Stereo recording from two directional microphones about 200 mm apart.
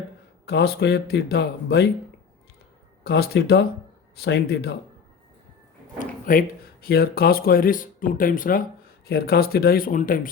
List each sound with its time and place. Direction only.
0.4 s speech: 55° left (ahead or behind)
3.0 s speech: 55° left (ahead or behind)
6.0 s a sound: 45° left (ahead or behind)
6.8 s speech: 50° left (ahead or behind)